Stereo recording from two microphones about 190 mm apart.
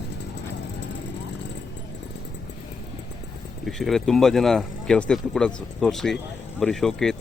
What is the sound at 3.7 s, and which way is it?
Speech, centre (ahead or behind).